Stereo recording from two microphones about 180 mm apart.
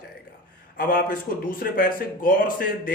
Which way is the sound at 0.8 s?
50° left (ahead or behind).